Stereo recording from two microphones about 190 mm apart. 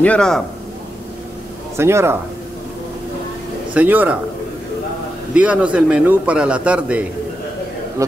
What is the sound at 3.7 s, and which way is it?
Speech, 10° right (ahead or behind).